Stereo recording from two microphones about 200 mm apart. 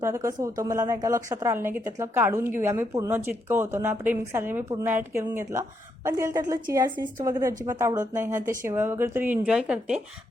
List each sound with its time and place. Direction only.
0.0 s a woman's voice: 15° right (ahead or behind)